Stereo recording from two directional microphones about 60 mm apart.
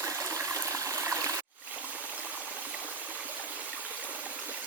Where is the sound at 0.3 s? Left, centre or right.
Right.